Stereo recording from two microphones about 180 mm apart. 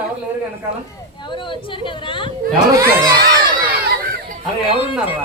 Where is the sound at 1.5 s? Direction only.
30° left (ahead or behind).